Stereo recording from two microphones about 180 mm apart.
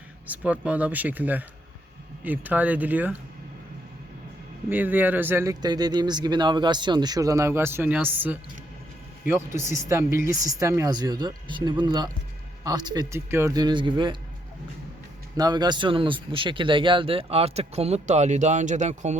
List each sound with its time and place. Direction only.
0.3 s speech: 5° right (ahead or behind)
4.7 s speech: 10° right (ahead or behind); by 14.2 s 25° right (ahead or behind)
15.4 s speech: 25° right (ahead or behind); by 19.2 s 40° right (ahead or behind)